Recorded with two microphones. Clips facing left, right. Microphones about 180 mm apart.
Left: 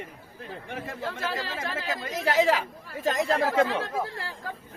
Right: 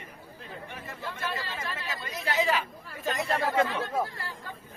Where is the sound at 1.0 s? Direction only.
90° left.